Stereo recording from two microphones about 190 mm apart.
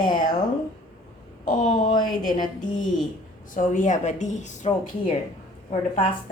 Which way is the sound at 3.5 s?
40° left (ahead or behind).